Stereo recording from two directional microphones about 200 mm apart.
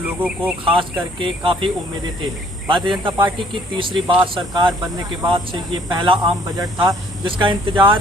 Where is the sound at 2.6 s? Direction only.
25° right (ahead or behind).